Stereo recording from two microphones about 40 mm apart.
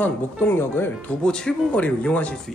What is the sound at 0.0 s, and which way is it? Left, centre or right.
Speech, left.